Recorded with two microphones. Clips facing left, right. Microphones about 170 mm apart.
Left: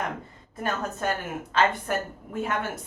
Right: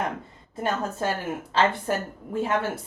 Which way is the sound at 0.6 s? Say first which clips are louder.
Right 2 dB; 30° right (ahead or behind).